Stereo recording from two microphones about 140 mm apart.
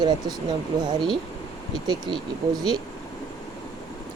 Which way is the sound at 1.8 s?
30° right (ahead or behind).